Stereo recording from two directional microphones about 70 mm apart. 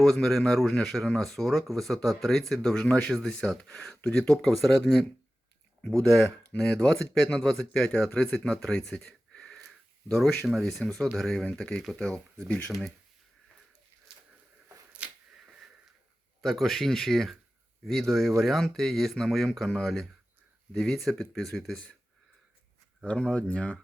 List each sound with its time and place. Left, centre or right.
0.0 s speech: centre
8.9 s a sound: centre
10.4 s speech: centre
14.9 s a sound: centre
16.4 s speech: centre
23.0 s speech: centre